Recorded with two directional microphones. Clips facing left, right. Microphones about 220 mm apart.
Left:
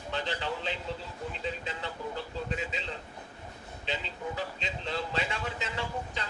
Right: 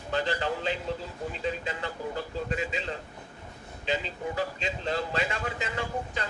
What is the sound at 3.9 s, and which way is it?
Speech, 45° right (ahead or behind).